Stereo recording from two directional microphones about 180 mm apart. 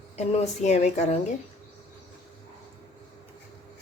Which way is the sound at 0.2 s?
40° left (ahead or behind).